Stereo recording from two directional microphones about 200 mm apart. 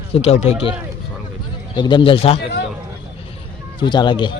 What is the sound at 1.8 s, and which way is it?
Speech, 20° left (ahead or behind).